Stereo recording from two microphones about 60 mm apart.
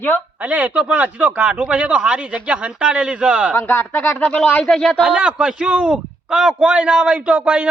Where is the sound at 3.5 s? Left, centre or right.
Left.